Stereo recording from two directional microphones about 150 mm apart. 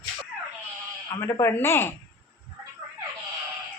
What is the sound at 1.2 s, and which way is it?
Speech, 20° left (ahead or behind).